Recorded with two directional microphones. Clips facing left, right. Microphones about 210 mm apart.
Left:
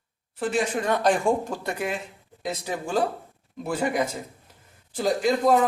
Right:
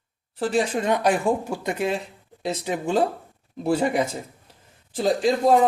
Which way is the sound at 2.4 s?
30° right (ahead or behind).